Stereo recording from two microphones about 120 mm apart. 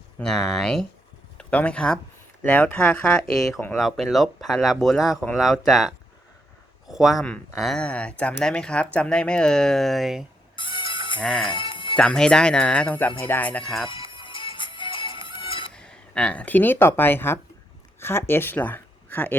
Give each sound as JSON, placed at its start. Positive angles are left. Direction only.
{"t": 0.2, "sound": "speech", "side_deg": 5}
{"t": 3.8, "sound": "speech", "side_deg": 0}
{"t": 10.5, "sound": "music", "side_deg": 45}
{"t": 11.2, "sound": "speech", "side_deg": 5}
{"t": 11.4, "sound": "music", "side_deg": 45}
{"t": 11.9, "sound": "speech", "side_deg": 5}
{"t": 13.8, "sound": "music", "side_deg": 45}
{"t": 15.7, "sound": "speech", "side_deg": 5}